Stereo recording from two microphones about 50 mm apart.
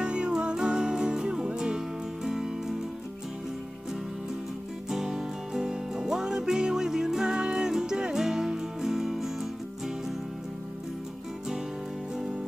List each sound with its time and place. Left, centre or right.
0.0 s music: centre
4.8 s music: centre